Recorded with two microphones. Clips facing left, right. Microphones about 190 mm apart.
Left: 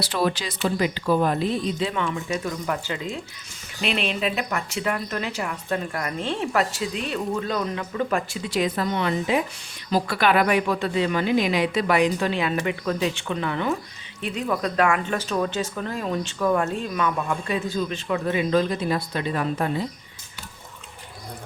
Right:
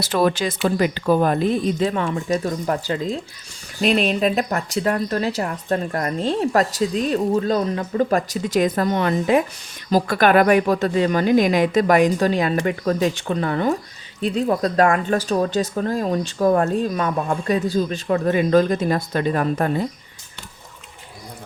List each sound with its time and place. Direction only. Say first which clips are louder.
0.0 s a woman's voice: right 5 dB; 45° right (ahead or behind)